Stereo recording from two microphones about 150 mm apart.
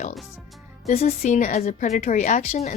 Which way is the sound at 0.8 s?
45° left (ahead or behind).